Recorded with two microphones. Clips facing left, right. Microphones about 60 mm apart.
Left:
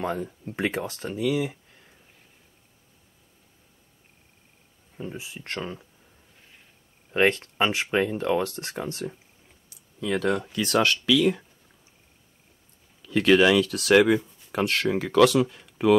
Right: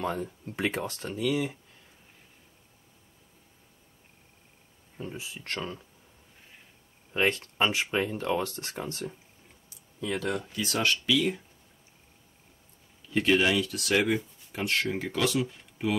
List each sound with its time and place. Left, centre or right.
0.7 s speech: centre
4.9 s speech: centre
5.2 s speech: centre
7.2 s speech: left
9.9 s speech: left
10.5 s speech: left
13.0 s speech: left